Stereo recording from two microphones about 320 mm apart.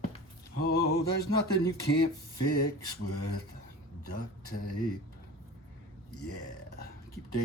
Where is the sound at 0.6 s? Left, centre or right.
Left.